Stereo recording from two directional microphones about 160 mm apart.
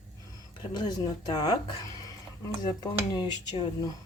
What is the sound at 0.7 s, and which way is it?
Speech, 25° left (ahead or behind).